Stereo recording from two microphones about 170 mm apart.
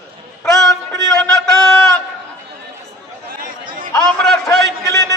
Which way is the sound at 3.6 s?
55° right (ahead or behind).